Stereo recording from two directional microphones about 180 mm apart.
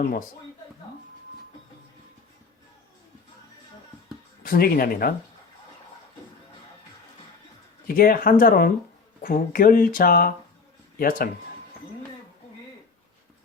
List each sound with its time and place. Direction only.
4.4 s speech: 55° left (ahead or behind)
7.9 s speech: 55° left (ahead or behind)